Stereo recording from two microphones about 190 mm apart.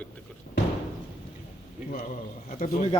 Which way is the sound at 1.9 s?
45° left (ahead or behind).